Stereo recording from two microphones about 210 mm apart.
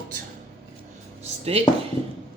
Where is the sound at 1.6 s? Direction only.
30° right (ahead or behind).